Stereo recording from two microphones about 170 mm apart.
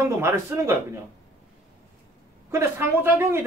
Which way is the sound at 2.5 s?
15° right (ahead or behind).